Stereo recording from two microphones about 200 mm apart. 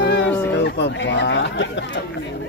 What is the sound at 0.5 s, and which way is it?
Speech, 60° left (ahead or behind).